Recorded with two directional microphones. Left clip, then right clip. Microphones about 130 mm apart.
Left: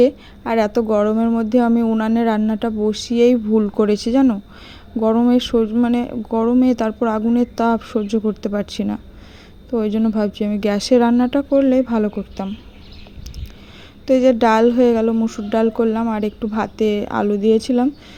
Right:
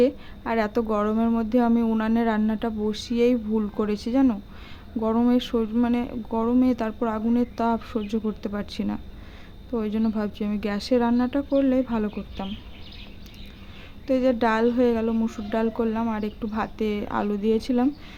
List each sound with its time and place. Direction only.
0.0 s speech: 35° left (ahead or behind)
14.1 s speech: 45° left (ahead or behind)